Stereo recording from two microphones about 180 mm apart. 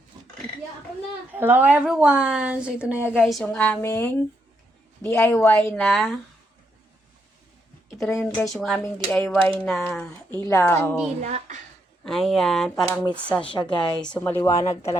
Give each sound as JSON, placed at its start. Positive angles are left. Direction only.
{"t": 1.3, "sound": "a woman's voice", "side_deg": -10}
{"t": 8.1, "sound": "a woman's voice", "side_deg": 10}
{"t": 10.4, "sound": "speech", "side_deg": 15}
{"t": 11.2, "sound": "a woman's voice", "side_deg": -40}
{"t": 12.0, "sound": "a woman's voice", "side_deg": 0}
{"t": 13.4, "sound": "a woman's voice", "side_deg": 25}
{"t": 13.7, "sound": "speech", "side_deg": 5}